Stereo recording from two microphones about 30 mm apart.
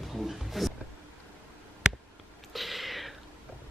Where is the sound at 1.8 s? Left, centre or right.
Right.